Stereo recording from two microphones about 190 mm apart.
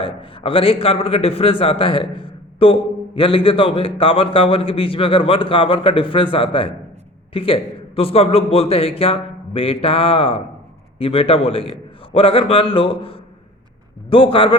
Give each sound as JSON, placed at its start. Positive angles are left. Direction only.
{"t": 0.0, "sound": "a man's voice", "side_deg": 30}